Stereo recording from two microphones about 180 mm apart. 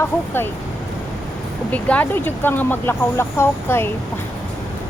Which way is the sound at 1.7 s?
10° left (ahead or behind).